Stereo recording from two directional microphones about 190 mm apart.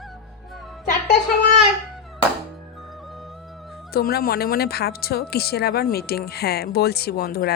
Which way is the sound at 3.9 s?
50° left (ahead or behind).